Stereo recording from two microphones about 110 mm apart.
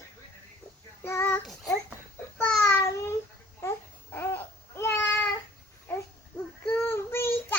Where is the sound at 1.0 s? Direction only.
20° left (ahead or behind).